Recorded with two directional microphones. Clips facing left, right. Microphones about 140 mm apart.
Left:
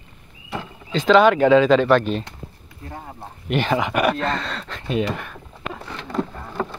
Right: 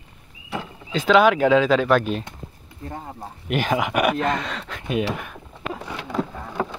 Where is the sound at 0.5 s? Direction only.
10° right (ahead or behind).